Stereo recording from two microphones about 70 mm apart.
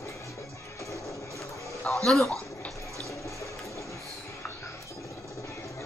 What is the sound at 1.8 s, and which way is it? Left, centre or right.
Speech, centre.